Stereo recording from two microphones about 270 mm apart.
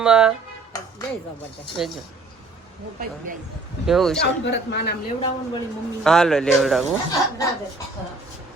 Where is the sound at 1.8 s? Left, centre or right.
Centre.